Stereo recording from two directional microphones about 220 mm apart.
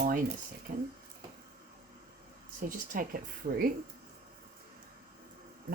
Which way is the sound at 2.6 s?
40° right (ahead or behind).